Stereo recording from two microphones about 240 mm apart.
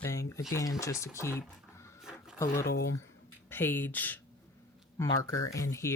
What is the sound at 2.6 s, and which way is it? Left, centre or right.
Speech, left.